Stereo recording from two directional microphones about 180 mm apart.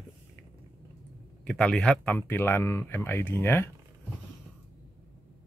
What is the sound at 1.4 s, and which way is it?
Speech, 5° left (ahead or behind).